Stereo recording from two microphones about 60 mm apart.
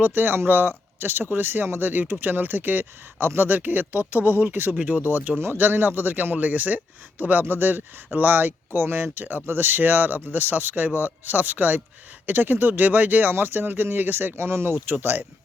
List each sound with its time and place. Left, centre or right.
0.0 s speech: right
4.7 s speech: centre
5.0 s speech: right
14.8 s speech: right